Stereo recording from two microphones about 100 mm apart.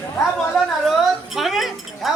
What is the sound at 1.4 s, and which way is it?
Speech, centre (ahead or behind).